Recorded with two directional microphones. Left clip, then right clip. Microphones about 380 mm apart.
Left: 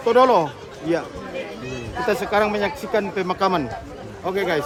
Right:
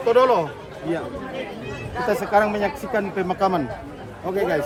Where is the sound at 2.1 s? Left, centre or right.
Centre.